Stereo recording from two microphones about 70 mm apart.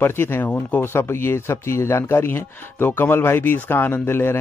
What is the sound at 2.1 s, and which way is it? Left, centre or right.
Speech, left.